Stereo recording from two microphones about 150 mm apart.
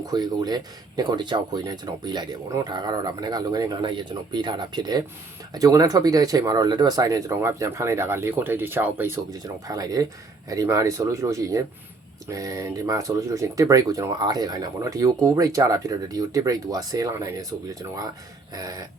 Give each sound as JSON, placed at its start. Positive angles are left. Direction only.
{"t": 0.0, "sound": "speech", "side_deg": -30}